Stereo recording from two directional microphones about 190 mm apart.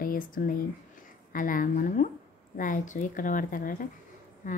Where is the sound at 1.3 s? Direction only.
45° left (ahead or behind).